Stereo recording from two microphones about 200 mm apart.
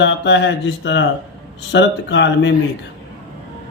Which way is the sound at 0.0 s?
60° left (ahead or behind).